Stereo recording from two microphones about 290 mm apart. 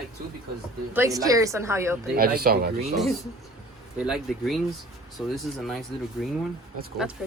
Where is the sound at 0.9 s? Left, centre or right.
Centre.